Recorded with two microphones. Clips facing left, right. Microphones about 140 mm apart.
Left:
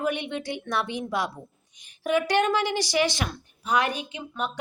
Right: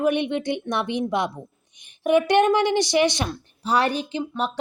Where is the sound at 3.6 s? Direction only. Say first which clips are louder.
Right 4 dB; 35° right (ahead or behind).